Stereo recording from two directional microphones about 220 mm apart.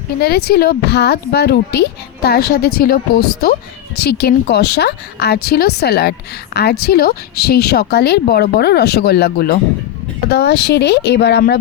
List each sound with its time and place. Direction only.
0.2 s a woman's voice: 45° left (ahead or behind)